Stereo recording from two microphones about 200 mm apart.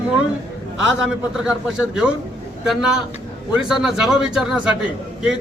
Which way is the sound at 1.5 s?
5° right (ahead or behind).